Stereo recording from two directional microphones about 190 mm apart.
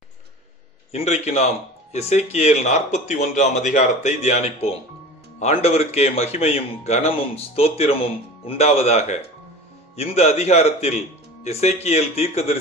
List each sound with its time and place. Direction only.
0.9 s speech: 35° left (ahead or behind)